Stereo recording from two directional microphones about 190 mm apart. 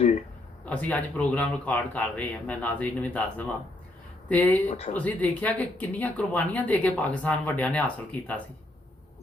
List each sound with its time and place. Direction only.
0.6 s speech: 5° left (ahead or behind)
4.7 s speech: 35° left (ahead or behind)
4.9 s speech: 5° left (ahead or behind)